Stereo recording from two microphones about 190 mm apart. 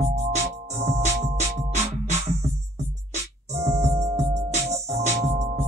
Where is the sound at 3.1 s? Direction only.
35° right (ahead or behind).